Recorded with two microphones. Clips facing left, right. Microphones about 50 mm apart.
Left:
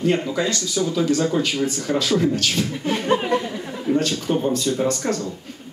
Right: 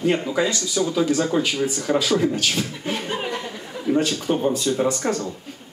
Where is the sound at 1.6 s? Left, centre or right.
Right.